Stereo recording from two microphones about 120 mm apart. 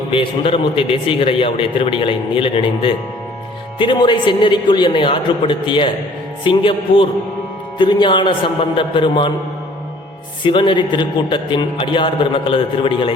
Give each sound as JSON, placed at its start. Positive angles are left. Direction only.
{"t": 0.1, "sound": "a man's voice", "side_deg": 50}
{"t": 10.4, "sound": "a man's voice", "side_deg": 45}